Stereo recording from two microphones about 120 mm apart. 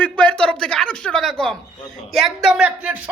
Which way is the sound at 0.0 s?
10° left (ahead or behind).